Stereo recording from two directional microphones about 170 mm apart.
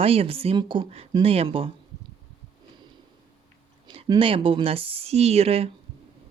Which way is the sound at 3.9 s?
30° right (ahead or behind).